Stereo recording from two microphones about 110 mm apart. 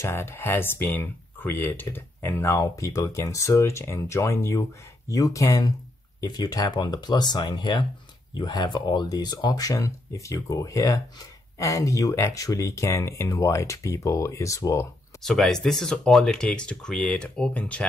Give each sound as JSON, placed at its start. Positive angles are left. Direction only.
{"t": 0.0, "sound": "speech", "side_deg": 20}
{"t": 15.2, "sound": "speech", "side_deg": 5}